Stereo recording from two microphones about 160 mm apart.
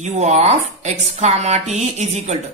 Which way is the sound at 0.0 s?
45° right (ahead or behind).